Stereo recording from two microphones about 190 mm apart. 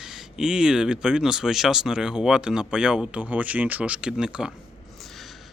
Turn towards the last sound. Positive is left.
turn(degrees=-5)  # may be behind; listen again after turning